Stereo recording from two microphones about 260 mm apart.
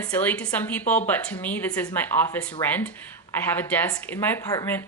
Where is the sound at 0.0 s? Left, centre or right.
Centre.